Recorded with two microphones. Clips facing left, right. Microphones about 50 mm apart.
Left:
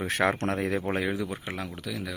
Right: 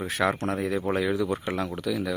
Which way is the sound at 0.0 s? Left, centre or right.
Left.